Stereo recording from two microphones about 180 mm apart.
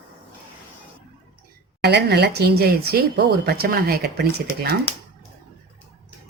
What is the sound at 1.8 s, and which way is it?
A woman's voice, 65° right (ahead or behind).